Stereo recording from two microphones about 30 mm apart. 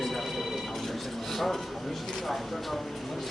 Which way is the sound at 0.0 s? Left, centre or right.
Centre.